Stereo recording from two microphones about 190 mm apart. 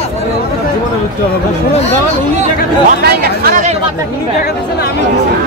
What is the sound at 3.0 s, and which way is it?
Chatter, 50° right (ahead or behind).